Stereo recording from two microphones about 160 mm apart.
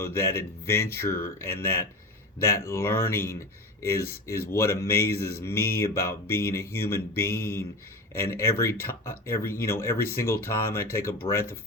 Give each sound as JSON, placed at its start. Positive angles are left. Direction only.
{"t": 0.0, "sound": "speech", "side_deg": 15}